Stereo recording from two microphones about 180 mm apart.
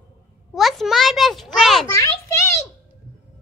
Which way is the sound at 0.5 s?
Centre (ahead or behind).